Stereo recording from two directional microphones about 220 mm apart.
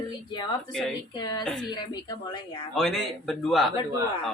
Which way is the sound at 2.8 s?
Centre (ahead or behind).